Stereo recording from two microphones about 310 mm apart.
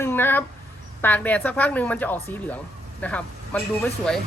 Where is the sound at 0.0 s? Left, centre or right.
Centre.